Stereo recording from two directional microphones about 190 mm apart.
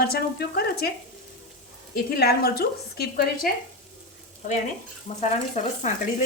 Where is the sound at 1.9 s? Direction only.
55° left (ahead or behind).